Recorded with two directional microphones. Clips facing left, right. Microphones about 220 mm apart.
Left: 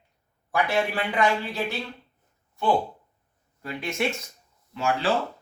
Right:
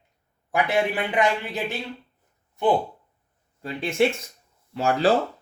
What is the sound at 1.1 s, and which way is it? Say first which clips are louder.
Speech: even; 15° right (ahead or behind).